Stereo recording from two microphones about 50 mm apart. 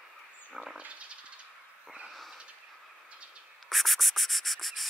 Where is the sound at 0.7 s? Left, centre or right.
Right.